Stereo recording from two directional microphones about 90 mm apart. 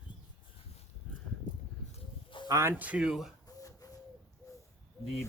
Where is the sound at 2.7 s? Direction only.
15° right (ahead or behind).